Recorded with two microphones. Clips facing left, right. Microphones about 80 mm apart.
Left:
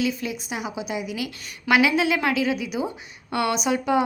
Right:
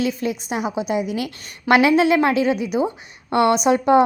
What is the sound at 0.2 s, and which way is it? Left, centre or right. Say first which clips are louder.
A woman's voice: right 6 dB; right.